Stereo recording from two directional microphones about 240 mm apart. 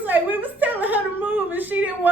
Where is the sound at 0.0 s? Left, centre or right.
Centre.